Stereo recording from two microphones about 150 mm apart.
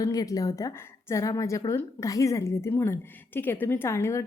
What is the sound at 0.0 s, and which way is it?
A woman's voice, 25° left (ahead or behind).